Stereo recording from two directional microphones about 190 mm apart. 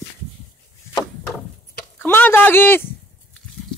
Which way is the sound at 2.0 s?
10° left (ahead or behind).